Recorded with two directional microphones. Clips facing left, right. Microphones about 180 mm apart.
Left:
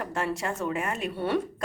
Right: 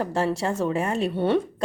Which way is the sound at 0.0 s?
30° right (ahead or behind).